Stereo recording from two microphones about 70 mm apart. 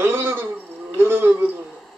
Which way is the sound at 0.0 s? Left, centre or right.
Right.